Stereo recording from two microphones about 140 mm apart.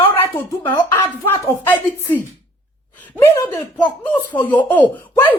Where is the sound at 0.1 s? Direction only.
15° left (ahead or behind).